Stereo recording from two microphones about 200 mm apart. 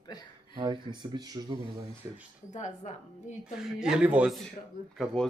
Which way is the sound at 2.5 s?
35° left (ahead or behind).